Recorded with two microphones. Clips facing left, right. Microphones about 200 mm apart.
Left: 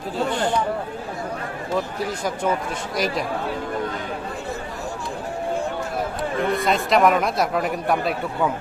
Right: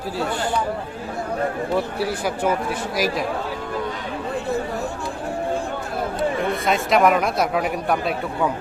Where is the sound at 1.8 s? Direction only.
10° right (ahead or behind).